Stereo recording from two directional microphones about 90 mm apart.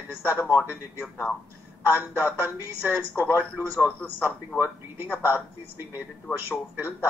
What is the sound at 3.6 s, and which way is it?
Speech, 25° left (ahead or behind).